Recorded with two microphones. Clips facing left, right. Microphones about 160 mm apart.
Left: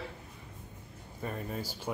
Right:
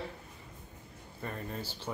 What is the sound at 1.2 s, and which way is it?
Speech, 10° left (ahead or behind).